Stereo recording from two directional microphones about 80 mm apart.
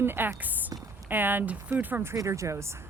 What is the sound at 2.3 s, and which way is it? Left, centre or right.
Speech, right.